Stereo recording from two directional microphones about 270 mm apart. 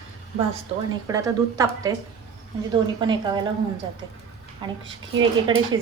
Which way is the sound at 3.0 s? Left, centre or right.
Centre.